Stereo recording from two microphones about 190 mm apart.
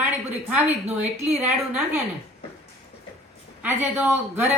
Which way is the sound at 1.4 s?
10° right (ahead or behind).